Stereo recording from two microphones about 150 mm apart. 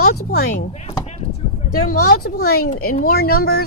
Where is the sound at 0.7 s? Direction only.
45° left (ahead or behind).